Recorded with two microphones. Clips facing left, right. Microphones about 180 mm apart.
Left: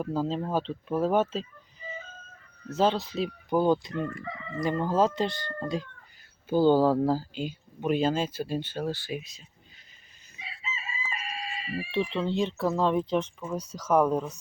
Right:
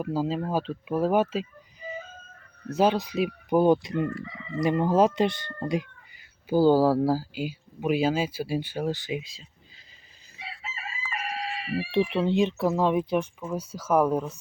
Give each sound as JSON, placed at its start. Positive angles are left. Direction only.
{"t": 0.0, "sound": "speech", "side_deg": -10}
{"t": 10.3, "sound": "chicken", "side_deg": -65}
{"t": 12.1, "sound": "speech", "side_deg": -15}